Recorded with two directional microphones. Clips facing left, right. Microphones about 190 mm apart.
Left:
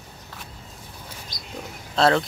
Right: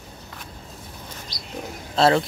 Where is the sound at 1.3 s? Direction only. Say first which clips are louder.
Right 2 dB; 50° left (ahead or behind).